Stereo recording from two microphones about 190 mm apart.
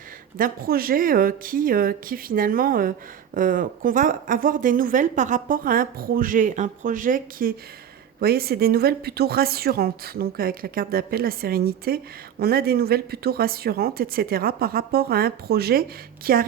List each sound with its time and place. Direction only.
0.3 s speech: 50° right (ahead or behind)